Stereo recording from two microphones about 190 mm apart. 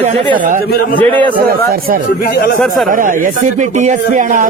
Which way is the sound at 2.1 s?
50° left (ahead or behind).